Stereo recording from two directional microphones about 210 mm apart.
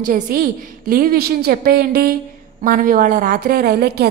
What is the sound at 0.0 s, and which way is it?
A woman's voice, 45° right (ahead or behind).